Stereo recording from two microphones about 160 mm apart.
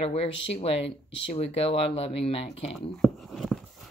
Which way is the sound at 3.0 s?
Centre (ahead or behind).